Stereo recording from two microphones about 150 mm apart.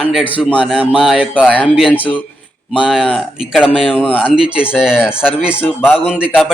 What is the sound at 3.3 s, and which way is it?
Speech, 5° right (ahead or behind).